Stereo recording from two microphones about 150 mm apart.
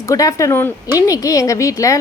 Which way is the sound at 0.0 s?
20° left (ahead or behind).